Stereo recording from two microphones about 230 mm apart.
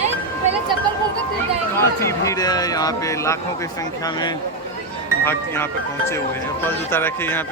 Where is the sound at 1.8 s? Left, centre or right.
Centre.